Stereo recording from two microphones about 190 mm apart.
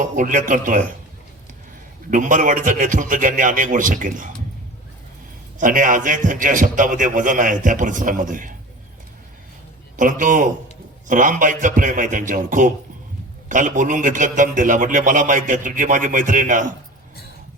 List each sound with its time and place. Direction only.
0.0 s a man's voice: 40° right (ahead or behind)
2.0 s a man's voice: 45° right (ahead or behind)
5.5 s a man's voice: 45° right (ahead or behind)
10.0 s a man's voice: 45° right (ahead or behind)